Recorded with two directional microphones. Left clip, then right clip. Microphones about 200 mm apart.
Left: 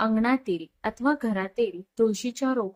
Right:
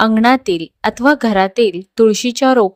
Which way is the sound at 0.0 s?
45° right (ahead or behind).